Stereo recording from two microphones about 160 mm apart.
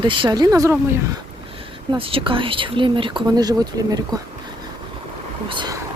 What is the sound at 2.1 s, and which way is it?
Speech, 35° right (ahead or behind).